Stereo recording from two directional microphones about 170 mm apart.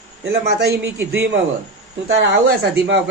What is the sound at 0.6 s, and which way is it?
Speech, 75° right (ahead or behind).